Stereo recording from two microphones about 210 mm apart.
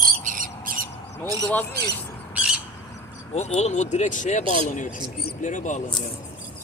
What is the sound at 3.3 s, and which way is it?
Speech, 30° left (ahead or behind).